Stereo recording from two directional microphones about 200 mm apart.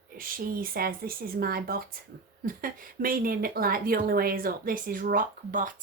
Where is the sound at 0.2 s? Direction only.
45° right (ahead or behind).